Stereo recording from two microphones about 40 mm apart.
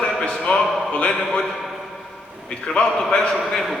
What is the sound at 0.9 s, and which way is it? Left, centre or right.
Speech, left.